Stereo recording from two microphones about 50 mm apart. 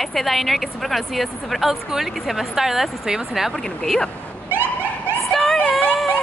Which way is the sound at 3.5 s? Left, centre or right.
Centre.